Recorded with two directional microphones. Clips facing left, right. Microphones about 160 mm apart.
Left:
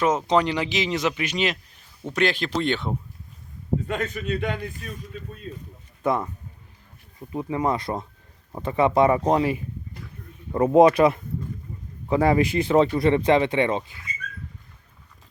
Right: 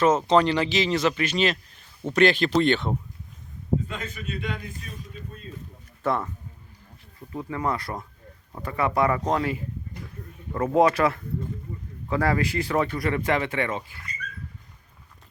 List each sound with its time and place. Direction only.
0.0 s speech: 15° left (ahead or behind)
2.1 s speech: centre (ahead or behind)
3.8 s a man's voice: 60° left (ahead or behind)
6.0 s speech: 15° left (ahead or behind)